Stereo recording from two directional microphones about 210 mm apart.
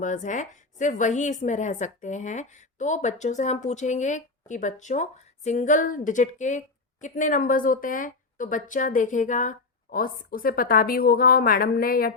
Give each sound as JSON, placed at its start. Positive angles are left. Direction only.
{"t": 0.0, "sound": "a woman's voice", "side_deg": 35}